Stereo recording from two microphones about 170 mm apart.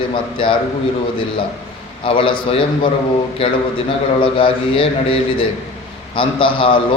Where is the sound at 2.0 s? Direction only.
30° left (ahead or behind).